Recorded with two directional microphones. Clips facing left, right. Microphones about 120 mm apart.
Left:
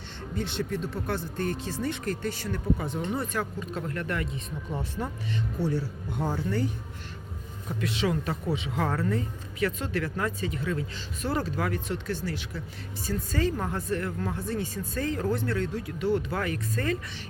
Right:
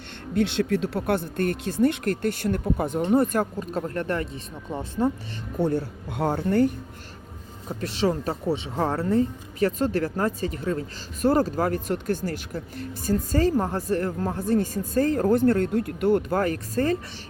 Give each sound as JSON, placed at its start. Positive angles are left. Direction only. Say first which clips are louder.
{"t": 0.3, "sound": "speech", "louder": "right 8 dB", "side_deg": -75}
{"t": 4.7, "sound": "speech", "louder": "right 9 dB", "side_deg": -20}
{"t": 5.5, "sound": "speech", "louder": "right 6 dB", "side_deg": -55}
{"t": 6.1, "sound": "speech", "louder": "right 6 dB", "side_deg": -80}
{"t": 7.7, "sound": "speech", "louder": "right 4 dB", "side_deg": -35}